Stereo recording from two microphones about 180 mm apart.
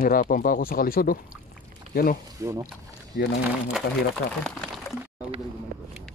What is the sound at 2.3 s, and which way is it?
Speech, 20° right (ahead or behind).